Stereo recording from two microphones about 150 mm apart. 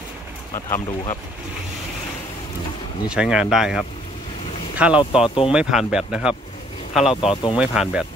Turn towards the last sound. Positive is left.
turn(degrees=-5)  # may be behind; listen again after turning